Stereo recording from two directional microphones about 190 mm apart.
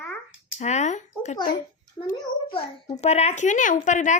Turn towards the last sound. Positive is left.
turn(degrees=40)  # may be behind; listen again after turning